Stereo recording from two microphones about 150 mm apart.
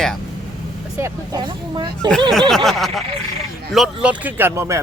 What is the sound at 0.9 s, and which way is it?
Speech, 20° right (ahead or behind).